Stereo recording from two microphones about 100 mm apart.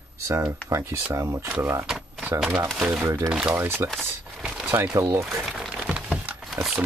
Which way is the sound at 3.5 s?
25° right (ahead or behind).